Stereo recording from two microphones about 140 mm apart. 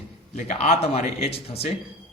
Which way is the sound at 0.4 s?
50° left (ahead or behind).